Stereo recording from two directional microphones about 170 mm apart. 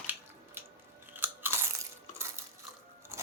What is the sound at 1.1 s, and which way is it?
Crunch, 10° right (ahead or behind).